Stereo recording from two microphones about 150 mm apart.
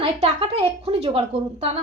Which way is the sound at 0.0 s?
40° right (ahead or behind).